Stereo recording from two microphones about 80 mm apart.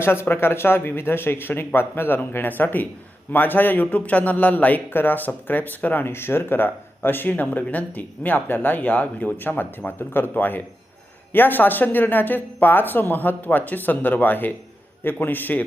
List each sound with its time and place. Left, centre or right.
0.0 s speech: left